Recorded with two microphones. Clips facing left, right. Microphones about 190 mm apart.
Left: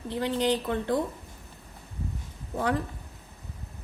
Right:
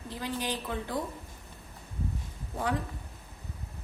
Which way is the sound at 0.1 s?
65° left (ahead or behind).